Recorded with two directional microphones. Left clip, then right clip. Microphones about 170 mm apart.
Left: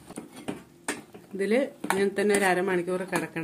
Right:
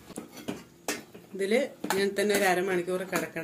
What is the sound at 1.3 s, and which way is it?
Speech, 65° left (ahead or behind).